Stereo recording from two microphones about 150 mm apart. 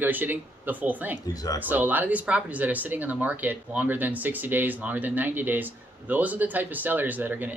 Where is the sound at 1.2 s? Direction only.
25° left (ahead or behind).